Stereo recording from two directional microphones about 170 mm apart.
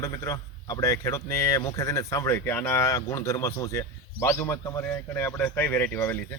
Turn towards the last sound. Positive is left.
turn(degrees=10)  # may be behind; listen again after turning